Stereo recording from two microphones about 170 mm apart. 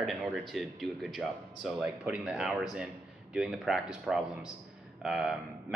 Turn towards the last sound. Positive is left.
turn(degrees=-5)  # may be behind; listen again after turning